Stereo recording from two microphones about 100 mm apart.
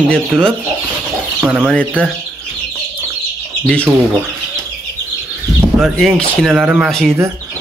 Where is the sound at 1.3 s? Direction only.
10° right (ahead or behind).